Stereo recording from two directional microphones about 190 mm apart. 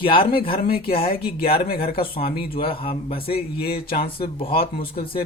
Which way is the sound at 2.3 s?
25° left (ahead or behind).